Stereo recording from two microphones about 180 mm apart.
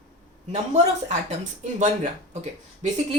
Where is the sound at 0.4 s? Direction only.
40° right (ahead or behind).